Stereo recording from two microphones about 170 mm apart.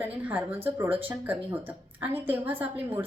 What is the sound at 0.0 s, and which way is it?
A woman's voice, 10° right (ahead or behind).